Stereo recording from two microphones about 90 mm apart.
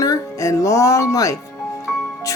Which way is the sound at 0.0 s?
40° left (ahead or behind).